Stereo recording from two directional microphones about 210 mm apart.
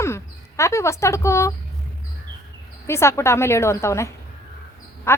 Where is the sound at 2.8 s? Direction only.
10° left (ahead or behind).